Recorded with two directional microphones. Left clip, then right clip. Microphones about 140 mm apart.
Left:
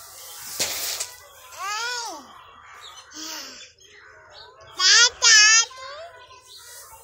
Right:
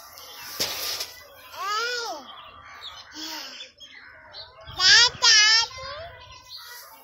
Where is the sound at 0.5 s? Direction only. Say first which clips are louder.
Left 1 dB; 40° left (ahead or behind).